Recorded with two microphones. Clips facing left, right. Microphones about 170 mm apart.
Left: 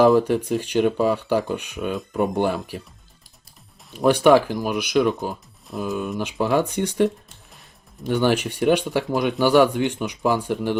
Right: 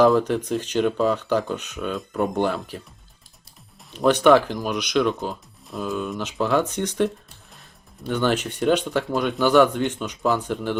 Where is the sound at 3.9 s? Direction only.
10° left (ahead or behind).